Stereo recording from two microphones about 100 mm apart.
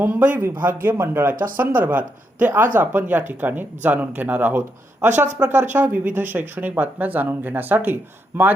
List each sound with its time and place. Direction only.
0.0 s speech: 20° right (ahead or behind)